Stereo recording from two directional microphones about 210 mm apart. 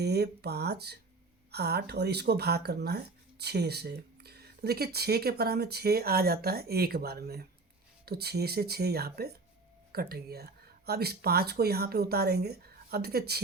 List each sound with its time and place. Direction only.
0.0 s speech: 50° right (ahead or behind)